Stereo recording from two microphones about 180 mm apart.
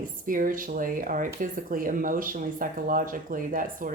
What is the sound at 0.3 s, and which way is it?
Speech, 50° right (ahead or behind).